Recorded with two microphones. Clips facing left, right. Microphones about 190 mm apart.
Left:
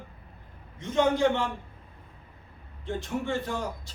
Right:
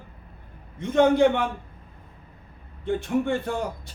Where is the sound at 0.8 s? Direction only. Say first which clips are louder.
Right 5 dB; 60° right (ahead or behind).